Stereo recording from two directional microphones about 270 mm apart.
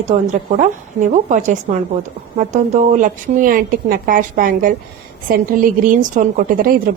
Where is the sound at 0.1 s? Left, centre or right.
Right.